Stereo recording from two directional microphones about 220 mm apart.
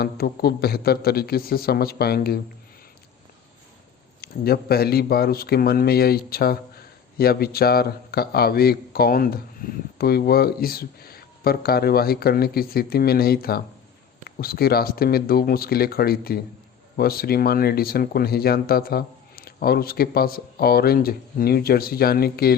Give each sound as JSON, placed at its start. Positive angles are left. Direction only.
{"t": 0.0, "sound": "speech", "side_deg": 45}
{"t": 4.2, "sound": "speech", "side_deg": 45}